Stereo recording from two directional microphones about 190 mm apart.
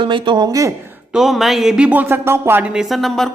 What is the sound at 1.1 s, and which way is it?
Speech, centre (ahead or behind).